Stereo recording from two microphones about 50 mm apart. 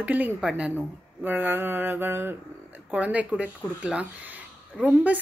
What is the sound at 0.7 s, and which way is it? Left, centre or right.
Mantra, right.